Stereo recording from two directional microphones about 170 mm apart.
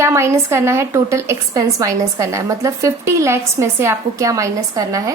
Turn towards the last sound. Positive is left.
turn(degrees=-20)  # may be behind; listen again after turning